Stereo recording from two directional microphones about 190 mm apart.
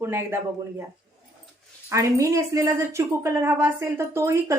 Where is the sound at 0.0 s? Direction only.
10° right (ahead or behind).